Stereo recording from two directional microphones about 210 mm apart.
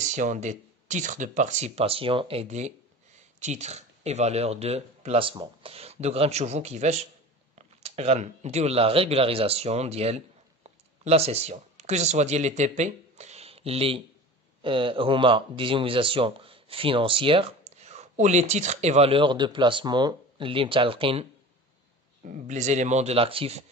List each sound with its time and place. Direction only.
0.1 s speech: 35° right (ahead or behind)